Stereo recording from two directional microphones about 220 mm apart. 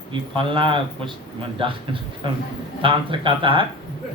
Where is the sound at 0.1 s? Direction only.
20° right (ahead or behind).